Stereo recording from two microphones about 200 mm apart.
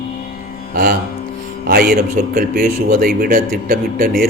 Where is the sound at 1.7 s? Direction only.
50° right (ahead or behind).